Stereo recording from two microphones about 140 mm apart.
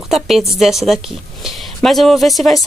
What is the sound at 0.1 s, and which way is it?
A woman's voice, centre (ahead or behind).